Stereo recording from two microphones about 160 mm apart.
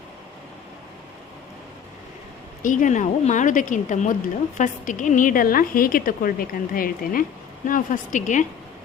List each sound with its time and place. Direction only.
2.6 s a woman's voice: 55° left (ahead or behind)